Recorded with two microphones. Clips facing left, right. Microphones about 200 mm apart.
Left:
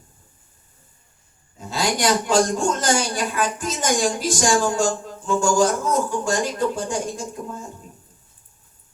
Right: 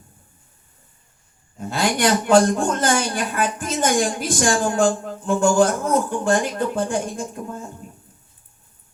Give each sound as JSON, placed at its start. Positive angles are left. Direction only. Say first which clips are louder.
{"t": 1.5, "sound": "a man's voice", "louder": "right 2 dB", "side_deg": -55}